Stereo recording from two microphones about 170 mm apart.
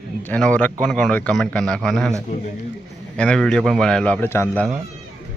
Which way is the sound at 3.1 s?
5° left (ahead or behind).